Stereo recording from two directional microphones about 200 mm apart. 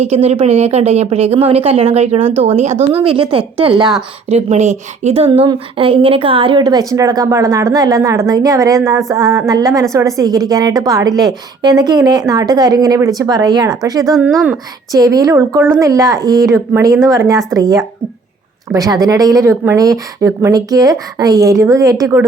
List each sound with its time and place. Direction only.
0.0 s a woman's voice: 30° right (ahead or behind)
14.2 s speech: 5° right (ahead or behind)
14.9 s speech: 15° right (ahead or behind)